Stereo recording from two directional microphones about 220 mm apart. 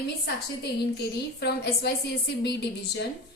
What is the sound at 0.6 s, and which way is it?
A woman's voice, 45° left (ahead or behind).